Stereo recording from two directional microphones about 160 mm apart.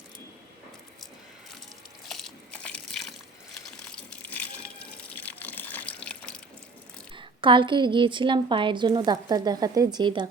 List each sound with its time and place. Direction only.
2.0 s a sound: centre (ahead or behind)
3.8 s water: 10° left (ahead or behind)
7.2 s a woman's voice: 30° right (ahead or behind)